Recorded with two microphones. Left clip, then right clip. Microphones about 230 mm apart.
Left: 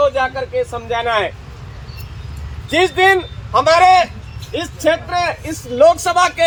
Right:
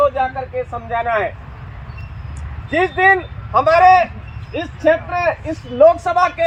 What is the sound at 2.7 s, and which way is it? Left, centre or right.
Speech, centre.